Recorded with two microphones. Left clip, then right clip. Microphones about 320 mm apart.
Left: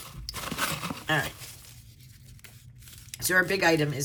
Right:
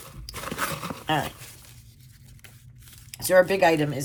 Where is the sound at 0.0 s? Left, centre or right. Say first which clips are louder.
Right 1 dB; centre.